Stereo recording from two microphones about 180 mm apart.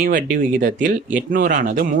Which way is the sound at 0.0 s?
50° right (ahead or behind).